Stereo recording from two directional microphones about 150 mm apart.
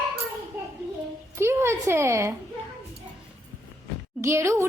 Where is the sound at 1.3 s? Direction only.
15° right (ahead or behind).